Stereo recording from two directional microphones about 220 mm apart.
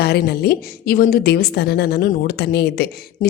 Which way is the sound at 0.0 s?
45° left (ahead or behind).